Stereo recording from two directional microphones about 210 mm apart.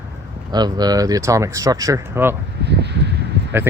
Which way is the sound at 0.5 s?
20° right (ahead or behind).